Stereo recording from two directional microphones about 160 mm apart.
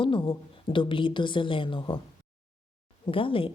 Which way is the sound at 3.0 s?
35° left (ahead or behind).